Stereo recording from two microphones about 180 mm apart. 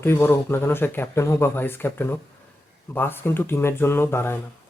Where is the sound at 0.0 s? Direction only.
15° left (ahead or behind).